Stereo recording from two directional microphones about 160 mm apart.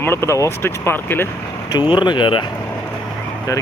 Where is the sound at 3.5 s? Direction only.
20° left (ahead or behind).